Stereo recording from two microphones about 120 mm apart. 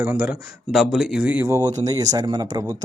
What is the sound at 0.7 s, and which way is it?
Speech, 5° right (ahead or behind).